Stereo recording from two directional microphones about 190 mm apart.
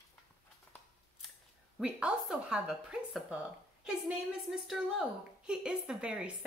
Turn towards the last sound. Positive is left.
turn(degrees=-5)  # may be behind; listen again after turning